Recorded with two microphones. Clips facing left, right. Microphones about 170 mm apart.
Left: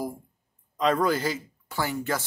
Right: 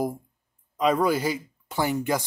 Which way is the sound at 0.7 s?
10° right (ahead or behind).